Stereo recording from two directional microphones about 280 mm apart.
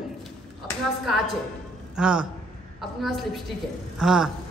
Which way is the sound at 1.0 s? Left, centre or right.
Centre.